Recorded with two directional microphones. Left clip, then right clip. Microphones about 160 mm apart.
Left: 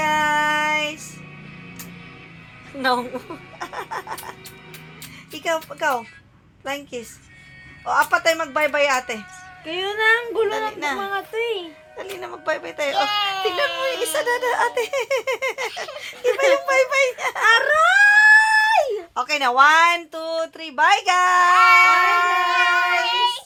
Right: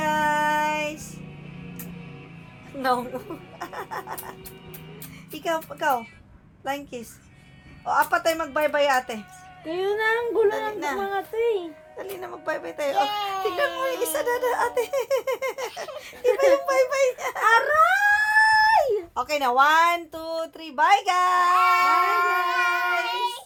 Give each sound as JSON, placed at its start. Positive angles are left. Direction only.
{"t": 0.0, "sound": "music", "side_deg": 25}
{"t": 3.6, "sound": "music", "side_deg": 25}
{"t": 5.3, "sound": "speech", "side_deg": 20}
{"t": 9.6, "sound": "speech", "side_deg": 0}
{"t": 10.5, "sound": "speech", "side_deg": 25}
{"t": 11.1, "sound": "speech", "side_deg": 0}
{"t": 12.1, "sound": "speech", "side_deg": 25}
{"t": 13.1, "sound": "baby cry", "side_deg": 5}
{"t": 14.0, "sound": "speech", "side_deg": 25}
{"t": 17.7, "sound": "dog", "side_deg": -5}
{"t": 19.1, "sound": "speech", "side_deg": 10}
{"t": 22.5, "sound": "child singing", "side_deg": 0}